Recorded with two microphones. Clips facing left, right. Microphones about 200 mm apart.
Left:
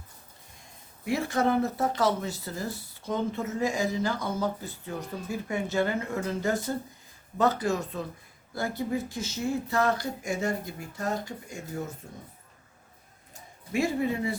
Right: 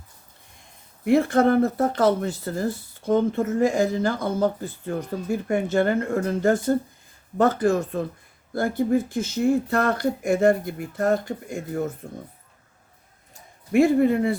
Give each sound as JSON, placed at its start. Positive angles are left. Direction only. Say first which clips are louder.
{"t": 1.0, "sound": "speech", "louder": "right 8 dB", "side_deg": -55}
{"t": 13.7, "sound": "speech", "louder": "right 9 dB", "side_deg": -55}